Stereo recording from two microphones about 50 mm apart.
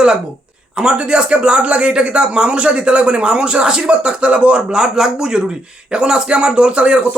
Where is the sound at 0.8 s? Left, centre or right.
Centre.